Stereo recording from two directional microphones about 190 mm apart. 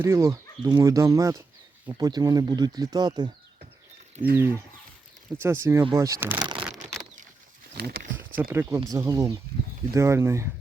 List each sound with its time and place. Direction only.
0.0 s speech: 15° right (ahead or behind)
4.4 s speech: 10° right (ahead or behind)
8.4 s speech: 10° right (ahead or behind)